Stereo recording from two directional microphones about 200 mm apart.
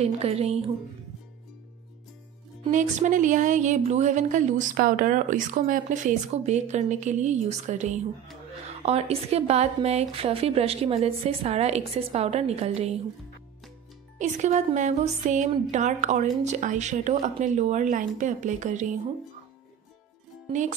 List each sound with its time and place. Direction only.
0.0 s speech: 30° right (ahead or behind)
2.7 s speech: 40° right (ahead or behind)
14.1 s speech: 35° right (ahead or behind)